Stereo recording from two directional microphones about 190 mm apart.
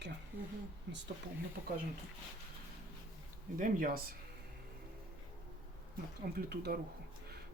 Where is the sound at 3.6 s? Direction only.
45° right (ahead or behind).